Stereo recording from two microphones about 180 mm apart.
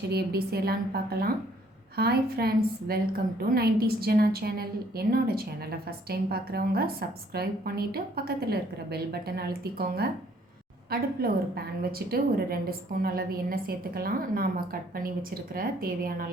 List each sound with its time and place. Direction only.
0.1 s a woman's voice: 60° right (ahead or behind)